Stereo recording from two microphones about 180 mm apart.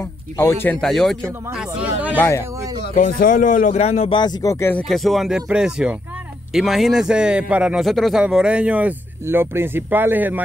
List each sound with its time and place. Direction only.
0.0 s a man's voice: 15° left (ahead or behind); by 2.1 s 5° right (ahead or behind)
2.1 s speech: 15° left (ahead or behind)
2.8 s speech: 50° left (ahead or behind); by 4.2 s 35° left (ahead or behind)
4.2 s speech: 20° left (ahead or behind)
4.8 s a man's voice: centre (ahead or behind)